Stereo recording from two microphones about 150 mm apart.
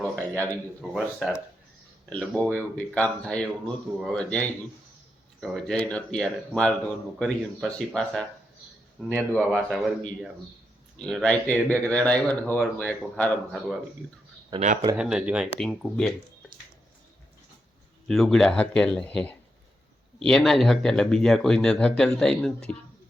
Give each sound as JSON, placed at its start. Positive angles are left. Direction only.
{"t": 0.0, "sound": "a sound", "side_deg": 15}
{"t": 0.8, "sound": "speech", "side_deg": 0}
{"t": 9.5, "sound": "speech", "side_deg": -5}
{"t": 10.9, "sound": "speech", "side_deg": 5}
{"t": 14.6, "sound": "speech", "side_deg": -50}
{"t": 14.9, "sound": "speech", "side_deg": -5}
{"t": 18.1, "sound": "speech", "side_deg": 0}